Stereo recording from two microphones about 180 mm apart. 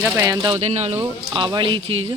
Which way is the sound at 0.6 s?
35° right (ahead or behind).